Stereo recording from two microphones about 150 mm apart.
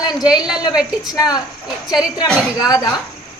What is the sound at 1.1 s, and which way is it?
Speech, 25° left (ahead or behind).